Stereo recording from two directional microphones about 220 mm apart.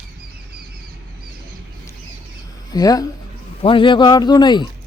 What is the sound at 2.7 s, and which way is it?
A man's voice, 15° left (ahead or behind).